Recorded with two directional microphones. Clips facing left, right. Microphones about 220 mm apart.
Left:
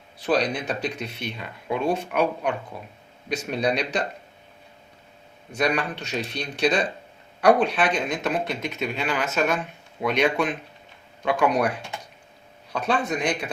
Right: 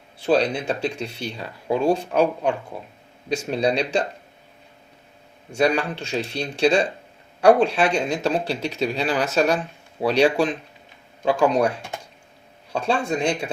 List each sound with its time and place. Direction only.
0.2 s speech: 25° right (ahead or behind)
5.5 s speech: 30° right (ahead or behind)